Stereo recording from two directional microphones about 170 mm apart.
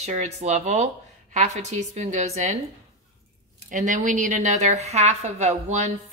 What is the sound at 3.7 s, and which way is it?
A woman's voice, 50° right (ahead or behind).